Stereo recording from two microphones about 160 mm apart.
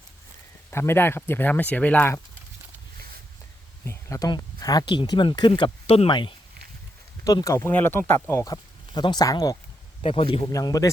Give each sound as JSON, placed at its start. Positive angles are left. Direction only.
{"t": 0.7, "sound": "speech", "side_deg": 15}
{"t": 3.8, "sound": "speech", "side_deg": 20}
{"t": 7.3, "sound": "speech", "side_deg": 20}
{"t": 8.9, "sound": "speech", "side_deg": 30}
{"t": 10.0, "sound": "a man's voice", "side_deg": 40}
{"t": 10.5, "sound": "speech", "side_deg": 20}